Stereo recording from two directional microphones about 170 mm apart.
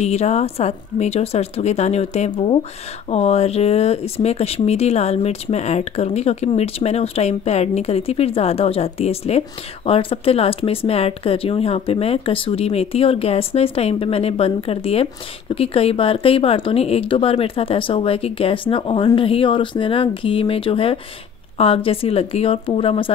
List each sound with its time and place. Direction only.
0.0 s speech: 40° left (ahead or behind)